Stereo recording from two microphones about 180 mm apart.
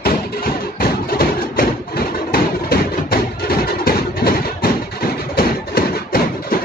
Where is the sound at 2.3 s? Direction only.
55° left (ahead or behind).